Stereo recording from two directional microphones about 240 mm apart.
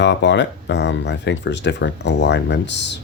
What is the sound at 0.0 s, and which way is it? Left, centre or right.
Speech, left.